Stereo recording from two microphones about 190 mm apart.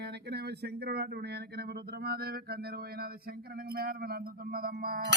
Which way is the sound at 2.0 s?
55° right (ahead or behind).